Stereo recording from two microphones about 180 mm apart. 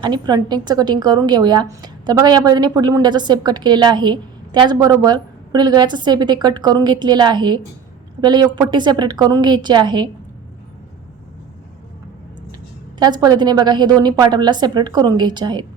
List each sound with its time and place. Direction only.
0.0 s speech: 25° right (ahead or behind)
13.0 s speech: 20° right (ahead or behind)